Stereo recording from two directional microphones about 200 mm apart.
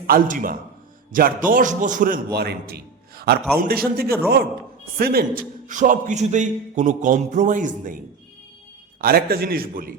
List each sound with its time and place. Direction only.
0.1 s a man's voice: 45° right (ahead or behind)
9.0 s a man's voice: 45° right (ahead or behind)